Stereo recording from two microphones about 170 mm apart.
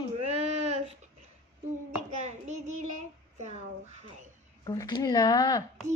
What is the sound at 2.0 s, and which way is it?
Hands, 45° right (ahead or behind).